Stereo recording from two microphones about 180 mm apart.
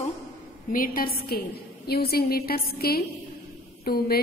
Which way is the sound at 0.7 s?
50° left (ahead or behind).